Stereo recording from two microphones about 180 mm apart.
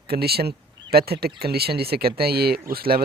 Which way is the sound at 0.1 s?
60° right (ahead or behind).